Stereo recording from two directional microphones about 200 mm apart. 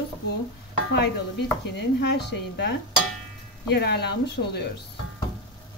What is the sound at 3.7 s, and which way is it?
Speech, 55° left (ahead or behind).